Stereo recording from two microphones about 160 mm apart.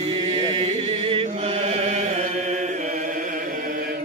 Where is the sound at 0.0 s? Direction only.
30° right (ahead or behind); by 4.0 s 60° right (ahead or behind).